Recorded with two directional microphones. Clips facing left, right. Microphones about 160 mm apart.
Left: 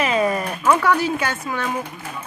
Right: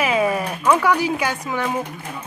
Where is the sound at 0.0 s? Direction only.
10° right (ahead or behind).